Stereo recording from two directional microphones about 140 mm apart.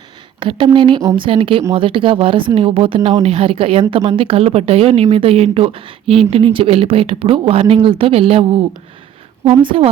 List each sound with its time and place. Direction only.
0.3 s a woman's voice: 35° right (ahead or behind)